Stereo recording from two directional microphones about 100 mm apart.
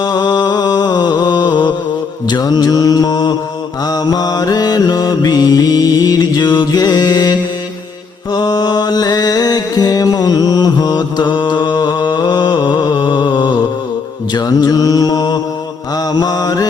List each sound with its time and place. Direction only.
0.0 s music: 45° left (ahead or behind)
2.2 s mantra: 45° left (ahead or behind)
8.3 s music: 45° left (ahead or behind)
14.3 s mantra: 40° left (ahead or behind)